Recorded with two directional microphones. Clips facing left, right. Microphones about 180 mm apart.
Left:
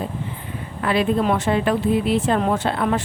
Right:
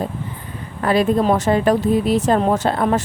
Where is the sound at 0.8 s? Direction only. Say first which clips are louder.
Right 3 dB; 40° right (ahead or behind).